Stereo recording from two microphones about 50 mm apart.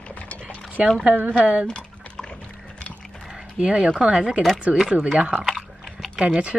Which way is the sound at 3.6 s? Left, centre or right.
Centre.